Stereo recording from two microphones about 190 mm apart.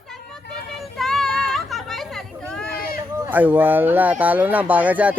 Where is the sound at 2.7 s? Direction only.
50° left (ahead or behind).